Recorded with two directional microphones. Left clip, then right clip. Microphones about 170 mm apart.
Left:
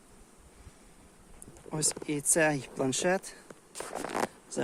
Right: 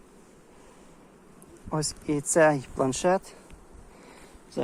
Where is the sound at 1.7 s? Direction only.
25° left (ahead or behind); by 2.6 s 45° left (ahead or behind).